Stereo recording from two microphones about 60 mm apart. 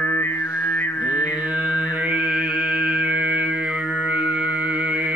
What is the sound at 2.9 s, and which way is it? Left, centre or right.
Mantra, centre.